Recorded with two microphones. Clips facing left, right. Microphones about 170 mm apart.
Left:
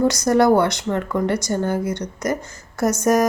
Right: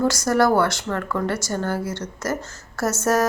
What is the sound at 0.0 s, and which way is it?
A woman's voice, 20° left (ahead or behind).